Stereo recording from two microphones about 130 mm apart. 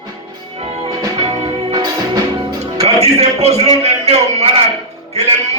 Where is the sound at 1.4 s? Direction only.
55° right (ahead or behind).